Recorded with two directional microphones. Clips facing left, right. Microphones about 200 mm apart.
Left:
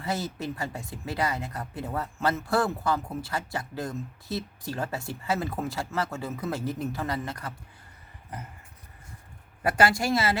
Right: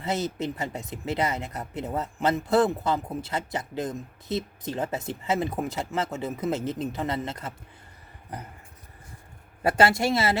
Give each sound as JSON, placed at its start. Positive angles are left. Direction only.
{"t": 0.0, "sound": "speech", "side_deg": -20}
{"t": 9.6, "sound": "speech", "side_deg": -25}